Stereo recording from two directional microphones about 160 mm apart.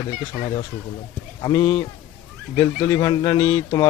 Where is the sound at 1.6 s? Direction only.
10° left (ahead or behind).